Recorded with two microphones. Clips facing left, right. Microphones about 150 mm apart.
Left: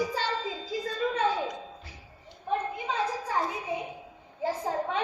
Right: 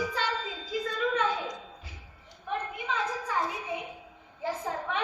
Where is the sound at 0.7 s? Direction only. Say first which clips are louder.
Right 1 dB; 35° left (ahead or behind).